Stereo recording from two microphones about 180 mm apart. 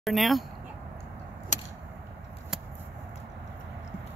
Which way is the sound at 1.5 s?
45° left (ahead or behind).